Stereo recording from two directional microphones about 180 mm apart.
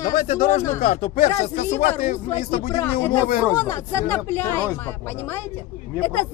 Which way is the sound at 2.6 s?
10° left (ahead or behind).